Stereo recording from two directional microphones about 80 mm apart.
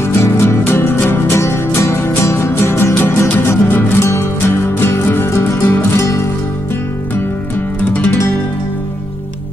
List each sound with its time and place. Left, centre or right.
0.0 s music: left
7.9 s music: centre